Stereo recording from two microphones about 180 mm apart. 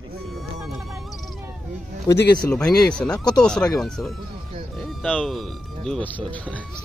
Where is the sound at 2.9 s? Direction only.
5° left (ahead or behind).